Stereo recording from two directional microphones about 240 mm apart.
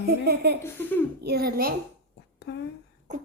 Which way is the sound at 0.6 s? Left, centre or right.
Centre.